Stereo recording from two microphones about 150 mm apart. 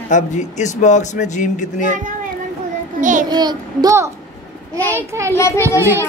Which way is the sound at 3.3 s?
30° right (ahead or behind).